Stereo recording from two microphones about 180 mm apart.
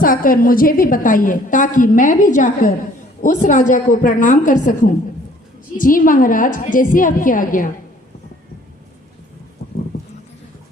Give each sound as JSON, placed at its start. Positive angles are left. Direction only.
{"t": 0.0, "sound": "a woman's voice", "side_deg": 50}